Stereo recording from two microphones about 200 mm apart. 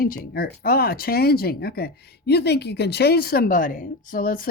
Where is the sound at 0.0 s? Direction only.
45° left (ahead or behind).